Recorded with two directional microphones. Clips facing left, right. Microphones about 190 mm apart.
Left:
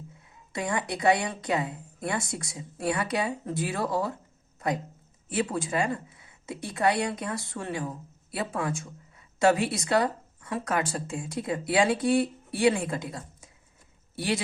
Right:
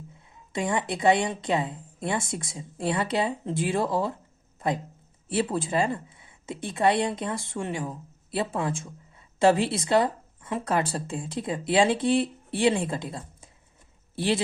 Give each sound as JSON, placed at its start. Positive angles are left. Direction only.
{"t": 0.5, "sound": "speech", "side_deg": -25}
{"t": 5.3, "sound": "speech", "side_deg": -30}